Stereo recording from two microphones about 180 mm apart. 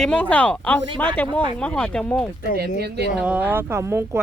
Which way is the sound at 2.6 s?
65° right (ahead or behind).